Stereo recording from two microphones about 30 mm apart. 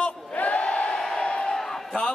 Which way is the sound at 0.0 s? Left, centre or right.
Left.